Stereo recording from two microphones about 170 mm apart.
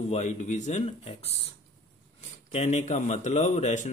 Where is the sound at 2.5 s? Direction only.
40° left (ahead or behind).